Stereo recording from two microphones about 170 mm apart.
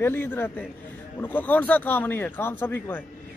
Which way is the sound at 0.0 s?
15° left (ahead or behind).